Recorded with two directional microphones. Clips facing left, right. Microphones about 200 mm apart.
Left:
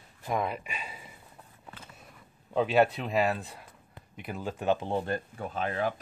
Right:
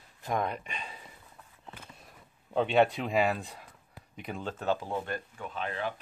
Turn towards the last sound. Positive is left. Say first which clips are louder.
# left 4 dB
turn(degrees=40)  # may be behind; listen again after turning